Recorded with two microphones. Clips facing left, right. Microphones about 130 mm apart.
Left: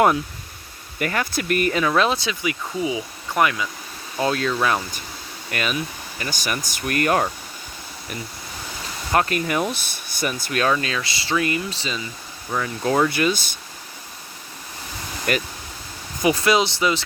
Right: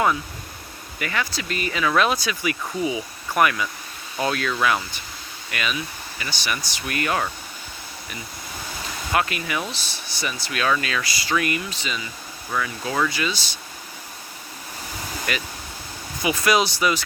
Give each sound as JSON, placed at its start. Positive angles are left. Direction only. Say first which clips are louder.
{"t": 0.9, "sound": "speech", "louder": "left 3 dB", "side_deg": 50}
{"t": 2.0, "sound": "speech", "louder": "left 1 dB", "side_deg": 25}
{"t": 4.6, "sound": "speech", "louder": "left 1 dB", "side_deg": 40}
{"t": 9.1, "sound": "speech", "louder": "left 4 dB", "side_deg": 45}
{"t": 10.7, "sound": "speech", "louder": "left 1 dB", "side_deg": 30}
{"t": 13.1, "sound": "speech", "louder": "left 5 dB", "side_deg": 55}
{"t": 15.3, "sound": "speech", "louder": "left 6 dB", "side_deg": 45}
{"t": 16.4, "sound": "speech", "louder": "left 1 dB", "side_deg": 25}